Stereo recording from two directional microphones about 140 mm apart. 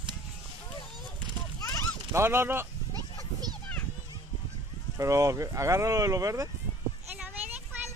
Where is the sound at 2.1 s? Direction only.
15° right (ahead or behind).